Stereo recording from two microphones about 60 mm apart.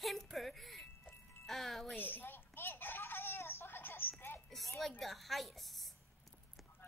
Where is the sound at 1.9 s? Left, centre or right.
Left.